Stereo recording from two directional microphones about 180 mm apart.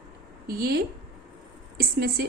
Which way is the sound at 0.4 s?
55° right (ahead or behind).